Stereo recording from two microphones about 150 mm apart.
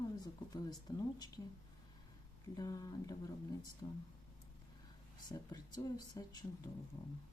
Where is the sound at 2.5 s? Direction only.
25° left (ahead or behind).